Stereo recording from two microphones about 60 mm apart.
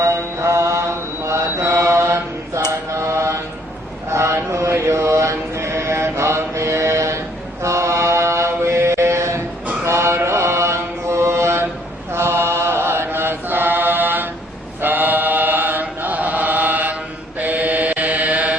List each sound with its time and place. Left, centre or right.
0.0 s mantra: right
14.8 s chant: right